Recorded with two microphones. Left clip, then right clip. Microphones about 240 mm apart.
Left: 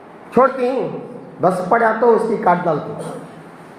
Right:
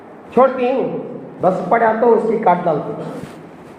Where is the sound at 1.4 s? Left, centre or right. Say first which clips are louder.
Even; left.